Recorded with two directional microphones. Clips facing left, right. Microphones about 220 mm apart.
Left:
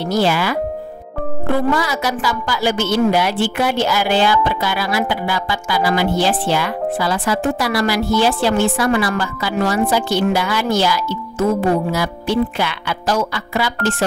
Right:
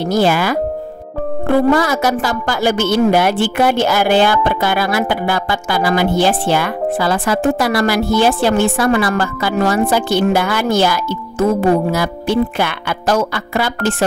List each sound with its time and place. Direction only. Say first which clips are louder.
0.0 s a woman's voice: right 3 dB; 50° right (ahead or behind)
1.7 s a woman's voice: right 5 dB; 50° right (ahead or behind)